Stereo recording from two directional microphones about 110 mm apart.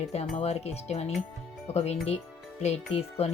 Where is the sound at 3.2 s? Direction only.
70° left (ahead or behind).